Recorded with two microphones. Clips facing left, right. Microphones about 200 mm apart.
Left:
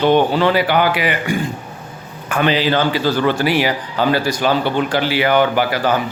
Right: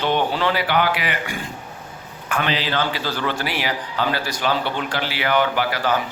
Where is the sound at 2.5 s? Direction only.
5° left (ahead or behind).